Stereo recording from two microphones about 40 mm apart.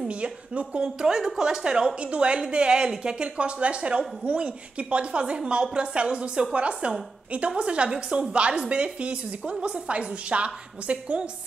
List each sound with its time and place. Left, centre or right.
0.2 s a woman's voice: right
1.0 s a woman's voice: centre; by 11.2 s right